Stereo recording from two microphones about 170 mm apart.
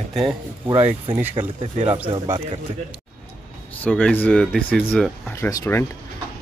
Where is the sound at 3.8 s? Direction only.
10° left (ahead or behind).